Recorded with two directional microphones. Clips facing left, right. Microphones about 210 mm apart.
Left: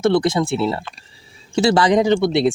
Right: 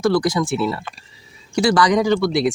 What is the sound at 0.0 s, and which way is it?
Speech, 25° left (ahead or behind).